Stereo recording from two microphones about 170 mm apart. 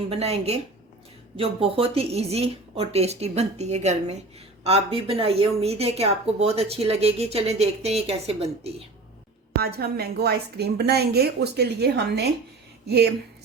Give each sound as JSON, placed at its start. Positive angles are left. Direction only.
{"t": 0.1, "sound": "a woman's voice", "side_deg": -35}
{"t": 9.6, "sound": "a woman's voice", "side_deg": -65}